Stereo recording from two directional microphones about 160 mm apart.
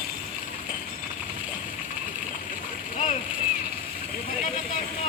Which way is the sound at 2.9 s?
50° left (ahead or behind).